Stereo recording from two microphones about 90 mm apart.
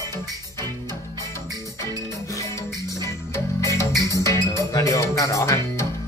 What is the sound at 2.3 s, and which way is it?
Music, 30° left (ahead or behind).